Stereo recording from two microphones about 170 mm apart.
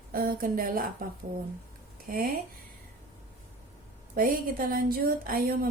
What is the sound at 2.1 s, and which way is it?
Speech, 55° right (ahead or behind).